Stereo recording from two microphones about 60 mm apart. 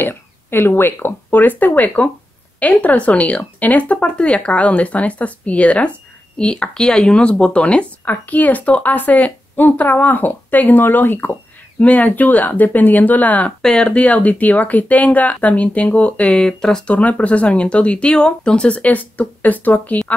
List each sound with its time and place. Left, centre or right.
0.0 s speech: left
13.6 s speech: centre
16.9 s speech: left